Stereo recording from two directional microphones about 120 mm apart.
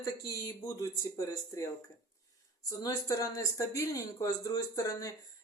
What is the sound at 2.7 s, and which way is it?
Speech, 30° left (ahead or behind).